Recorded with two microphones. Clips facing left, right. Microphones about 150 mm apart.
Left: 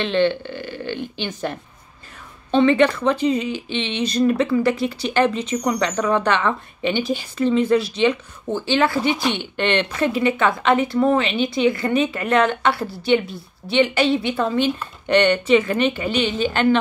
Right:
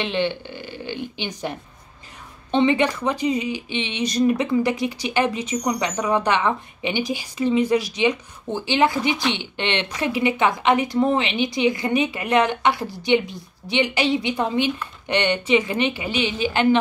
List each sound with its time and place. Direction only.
0.0 s speech: 15° right (ahead or behind)